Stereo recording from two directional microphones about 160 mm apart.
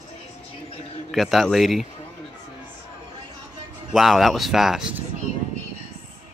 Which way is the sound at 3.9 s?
Centre (ahead or behind).